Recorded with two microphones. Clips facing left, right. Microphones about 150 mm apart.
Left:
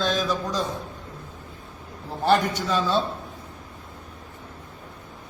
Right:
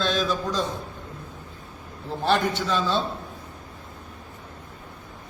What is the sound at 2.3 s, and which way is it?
Speech, 40° left (ahead or behind).